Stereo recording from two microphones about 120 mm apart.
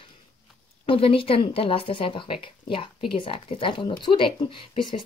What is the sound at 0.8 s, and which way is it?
Speech, 50° left (ahead or behind).